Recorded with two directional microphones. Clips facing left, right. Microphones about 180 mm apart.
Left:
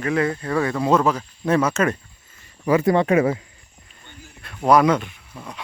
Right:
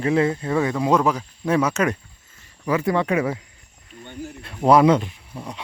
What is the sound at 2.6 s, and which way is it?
Speech, 40° left (ahead or behind).